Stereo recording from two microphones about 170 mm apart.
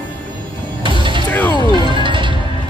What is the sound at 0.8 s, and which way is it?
Music, 30° right (ahead or behind).